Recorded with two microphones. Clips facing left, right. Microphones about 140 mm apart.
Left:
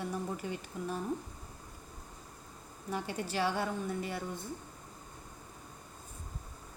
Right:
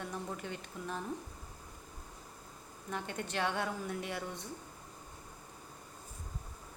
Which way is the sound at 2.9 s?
5° left (ahead or behind).